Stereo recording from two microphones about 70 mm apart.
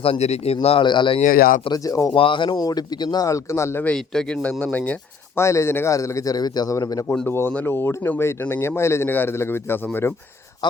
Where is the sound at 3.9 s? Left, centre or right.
Centre.